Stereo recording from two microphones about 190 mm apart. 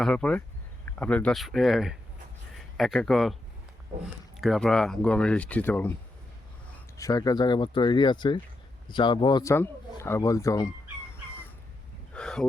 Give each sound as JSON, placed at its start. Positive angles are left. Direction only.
{"t": 0.0, "sound": "speech", "side_deg": 5}
{"t": 6.9, "sound": "speech", "side_deg": 15}
{"t": 12.1, "sound": "a sound", "side_deg": 5}